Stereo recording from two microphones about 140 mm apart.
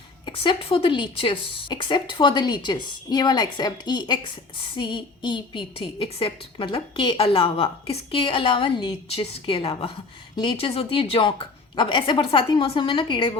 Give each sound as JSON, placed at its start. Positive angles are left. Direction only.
{"t": 0.3, "sound": "a woman's voice", "side_deg": 40}